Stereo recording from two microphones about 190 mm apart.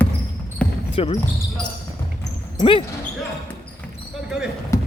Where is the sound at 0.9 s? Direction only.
30° left (ahead or behind).